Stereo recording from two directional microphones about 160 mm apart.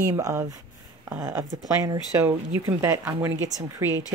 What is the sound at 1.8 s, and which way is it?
Speech, 20° right (ahead or behind).